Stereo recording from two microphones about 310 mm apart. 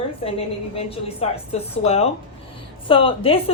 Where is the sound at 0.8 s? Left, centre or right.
Centre.